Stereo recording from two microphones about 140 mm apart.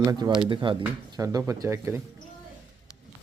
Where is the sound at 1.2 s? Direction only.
20° right (ahead or behind).